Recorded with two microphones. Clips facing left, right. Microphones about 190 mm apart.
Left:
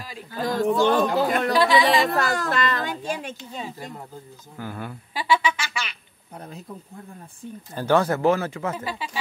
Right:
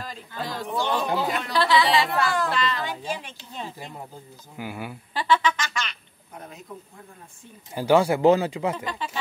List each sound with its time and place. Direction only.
0.0 s a sound: 10° left (ahead or behind)
0.4 s speech: 45° left (ahead or behind)
1.6 s a woman's voice: 15° left (ahead or behind)
2.0 s a woman's voice: 45° left (ahead or behind)
4.6 s speech: 10° right (ahead or behind)
5.1 s a woman's voice: 10° left (ahead or behind)
6.3 s bee: 35° left (ahead or behind)
7.7 s speech: 10° right (ahead or behind)
8.7 s a woman's voice: 10° left (ahead or behind)